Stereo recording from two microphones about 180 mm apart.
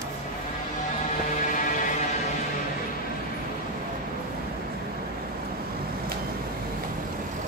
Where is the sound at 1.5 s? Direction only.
45° left (ahead or behind).